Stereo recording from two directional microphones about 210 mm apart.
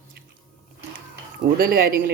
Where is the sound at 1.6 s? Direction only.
45° right (ahead or behind).